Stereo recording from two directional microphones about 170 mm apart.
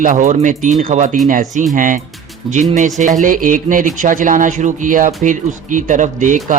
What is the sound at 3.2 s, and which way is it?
A man's voice, 50° right (ahead or behind).